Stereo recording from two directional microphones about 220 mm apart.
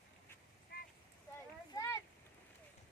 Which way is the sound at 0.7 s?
45° left (ahead or behind).